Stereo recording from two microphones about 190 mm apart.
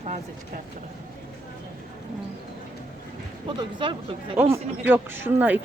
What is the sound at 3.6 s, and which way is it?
Speech, 25° right (ahead or behind).